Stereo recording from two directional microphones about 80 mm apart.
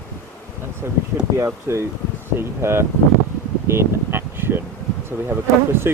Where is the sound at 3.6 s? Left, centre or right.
Right.